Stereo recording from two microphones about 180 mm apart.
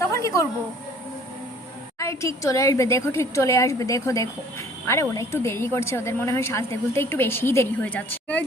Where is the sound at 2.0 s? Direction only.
15° left (ahead or behind).